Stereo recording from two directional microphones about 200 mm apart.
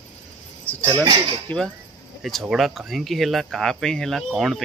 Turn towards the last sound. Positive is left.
turn(degrees=0)  # may be behind; listen again after turning